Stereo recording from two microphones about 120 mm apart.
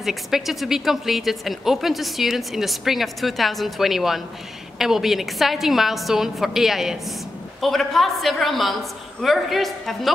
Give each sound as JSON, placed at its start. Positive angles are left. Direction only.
{"t": 0.0, "sound": "speech", "side_deg": 0}